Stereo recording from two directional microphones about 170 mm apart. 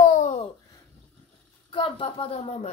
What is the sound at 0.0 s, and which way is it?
Babbling, 45° left (ahead or behind).